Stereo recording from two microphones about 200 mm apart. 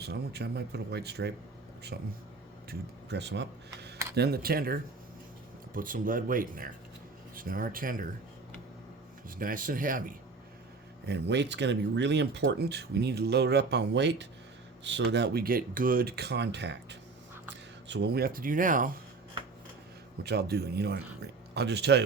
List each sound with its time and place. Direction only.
0.0 s speech: 55° right (ahead or behind)
9.4 s speech: 45° right (ahead or behind)
11.0 s speech: 60° right (ahead or behind); by 18.9 s 40° right (ahead or behind)
20.2 s speech: 55° right (ahead or behind)